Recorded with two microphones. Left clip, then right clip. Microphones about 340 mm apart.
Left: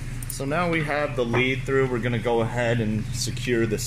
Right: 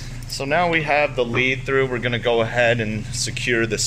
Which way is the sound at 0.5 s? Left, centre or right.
Right.